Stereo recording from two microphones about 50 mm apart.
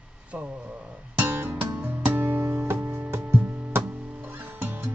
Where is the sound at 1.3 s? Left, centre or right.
Right.